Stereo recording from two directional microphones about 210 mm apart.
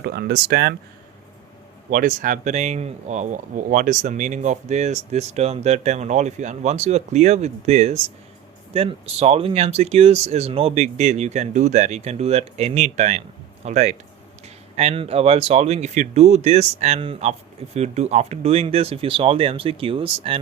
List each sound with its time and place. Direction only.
0.0 s speech: 50° right (ahead or behind)
1.9 s speech: 40° right (ahead or behind)